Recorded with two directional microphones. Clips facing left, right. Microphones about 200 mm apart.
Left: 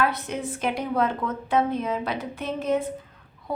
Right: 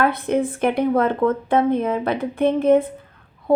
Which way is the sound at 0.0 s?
55° right (ahead or behind).